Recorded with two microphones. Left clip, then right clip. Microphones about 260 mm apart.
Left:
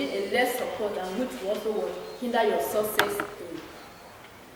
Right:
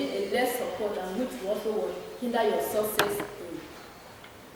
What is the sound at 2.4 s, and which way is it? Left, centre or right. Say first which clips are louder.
Speech: left 1 dB; centre.